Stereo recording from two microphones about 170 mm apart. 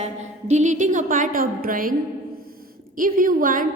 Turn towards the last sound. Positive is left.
turn(degrees=-55)  # may be behind; listen again after turning